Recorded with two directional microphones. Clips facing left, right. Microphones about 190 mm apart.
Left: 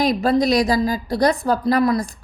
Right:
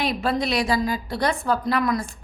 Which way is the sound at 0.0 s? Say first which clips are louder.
Left 6 dB; 40° left (ahead or behind).